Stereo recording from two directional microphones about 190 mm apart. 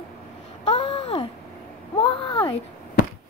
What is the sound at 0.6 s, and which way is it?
Babbling, 30° left (ahead or behind).